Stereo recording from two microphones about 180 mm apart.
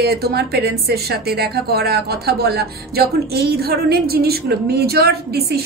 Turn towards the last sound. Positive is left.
turn(degrees=-60)  # may be behind; listen again after turning